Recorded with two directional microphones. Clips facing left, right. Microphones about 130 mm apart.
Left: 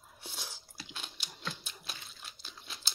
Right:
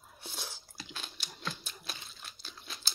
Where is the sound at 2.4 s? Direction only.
20° left (ahead or behind).